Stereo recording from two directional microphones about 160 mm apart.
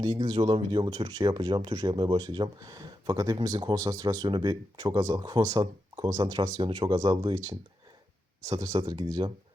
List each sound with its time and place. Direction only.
0.0 s speech: 25° right (ahead or behind)